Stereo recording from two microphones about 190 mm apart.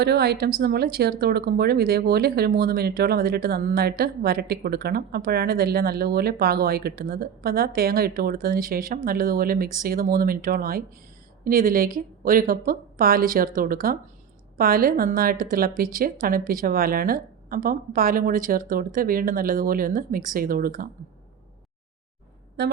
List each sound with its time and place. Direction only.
0.0 s a woman's voice: 60° right (ahead or behind)